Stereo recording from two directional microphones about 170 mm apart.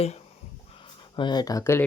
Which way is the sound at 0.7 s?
30° left (ahead or behind).